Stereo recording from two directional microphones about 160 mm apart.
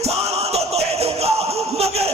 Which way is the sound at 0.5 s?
40° right (ahead or behind).